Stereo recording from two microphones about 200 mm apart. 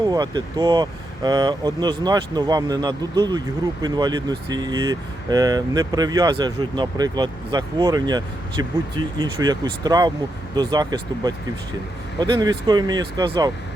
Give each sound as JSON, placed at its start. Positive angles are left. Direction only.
{"t": 0.0, "sound": "speech", "side_deg": -20}